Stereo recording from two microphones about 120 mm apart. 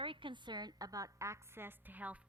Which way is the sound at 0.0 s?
45° right (ahead or behind).